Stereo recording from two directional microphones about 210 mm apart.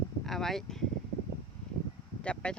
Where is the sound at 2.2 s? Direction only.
5° left (ahead or behind).